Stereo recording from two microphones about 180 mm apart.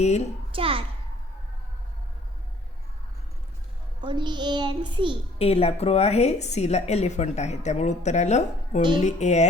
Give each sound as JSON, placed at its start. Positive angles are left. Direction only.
{"t": 0.5, "sound": "a child's voice", "side_deg": -30}
{"t": 4.0, "sound": "child singing", "side_deg": -25}
{"t": 5.4, "sound": "a woman's voice", "side_deg": 35}